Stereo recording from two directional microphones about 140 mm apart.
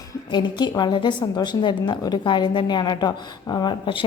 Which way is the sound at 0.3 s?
30° left (ahead or behind).